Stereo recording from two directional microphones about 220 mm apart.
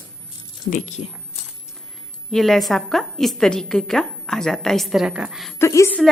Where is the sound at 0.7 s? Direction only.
30° left (ahead or behind).